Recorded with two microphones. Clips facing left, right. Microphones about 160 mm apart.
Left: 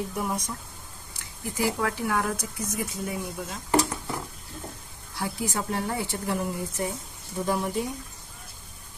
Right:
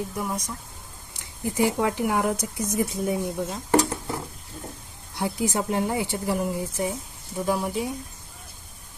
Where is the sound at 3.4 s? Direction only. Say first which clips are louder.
Right 2 dB; 30° right (ahead or behind).